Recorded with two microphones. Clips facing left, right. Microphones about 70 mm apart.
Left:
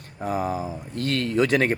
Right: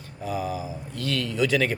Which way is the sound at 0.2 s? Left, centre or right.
Left.